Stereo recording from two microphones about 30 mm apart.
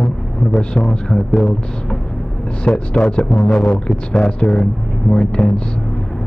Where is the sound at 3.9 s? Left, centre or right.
Left.